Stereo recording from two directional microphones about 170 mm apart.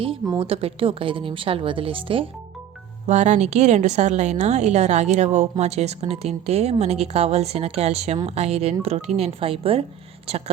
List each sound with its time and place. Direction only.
0.3 s a woman's voice: 35° right (ahead or behind)
3.1 s a woman's voice: 45° right (ahead or behind)